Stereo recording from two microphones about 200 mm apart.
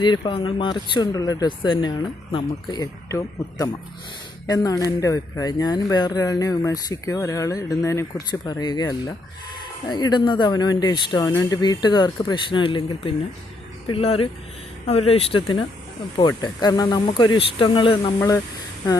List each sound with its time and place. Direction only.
0.0 s speech: 25° left (ahead or behind)